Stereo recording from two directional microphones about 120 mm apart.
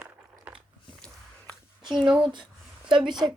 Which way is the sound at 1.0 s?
10° left (ahead or behind).